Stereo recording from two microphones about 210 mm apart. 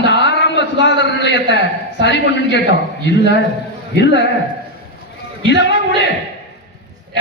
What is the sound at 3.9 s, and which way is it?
Speech, 55° left (ahead or behind).